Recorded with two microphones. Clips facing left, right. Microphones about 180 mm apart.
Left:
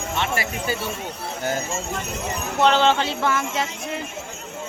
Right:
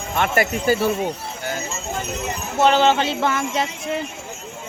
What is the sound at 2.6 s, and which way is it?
Speech, 10° right (ahead or behind).